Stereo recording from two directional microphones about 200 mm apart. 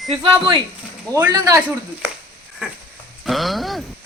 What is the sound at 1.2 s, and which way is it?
Speech, 15° right (ahead or behind).